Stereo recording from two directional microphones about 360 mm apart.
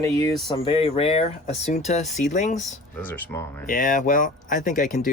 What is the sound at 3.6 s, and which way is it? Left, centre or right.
Speech, left.